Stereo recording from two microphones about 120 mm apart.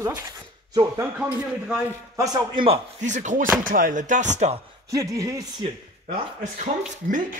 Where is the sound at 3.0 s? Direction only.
90° right.